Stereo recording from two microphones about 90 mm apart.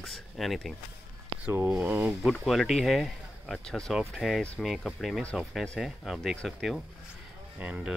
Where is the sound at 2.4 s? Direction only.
Centre (ahead or behind).